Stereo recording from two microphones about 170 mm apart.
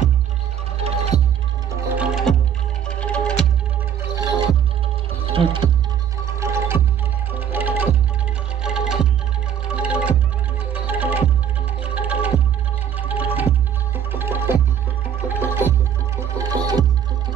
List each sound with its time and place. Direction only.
0.7 s music: 40° right (ahead or behind)
2.0 s music: 5° right (ahead or behind)
5.2 s music: 30° right (ahead or behind)
6.2 s music: 15° right (ahead or behind)